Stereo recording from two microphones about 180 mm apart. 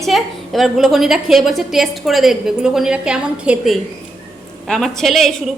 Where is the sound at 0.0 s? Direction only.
Centre (ahead or behind).